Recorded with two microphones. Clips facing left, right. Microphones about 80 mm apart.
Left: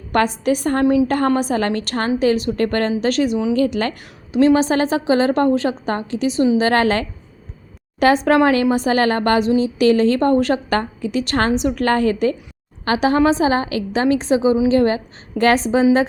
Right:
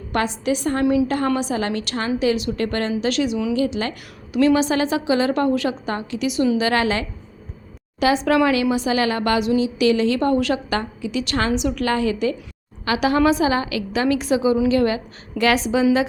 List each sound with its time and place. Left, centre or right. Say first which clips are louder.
0.1 s a woman's voice: left 4 dB; left
4.3 s a woman's voice: left 3 dB; left